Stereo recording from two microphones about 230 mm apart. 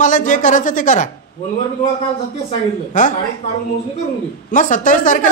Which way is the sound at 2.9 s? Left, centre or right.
Left.